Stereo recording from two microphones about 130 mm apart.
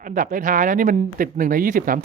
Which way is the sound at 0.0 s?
90° right.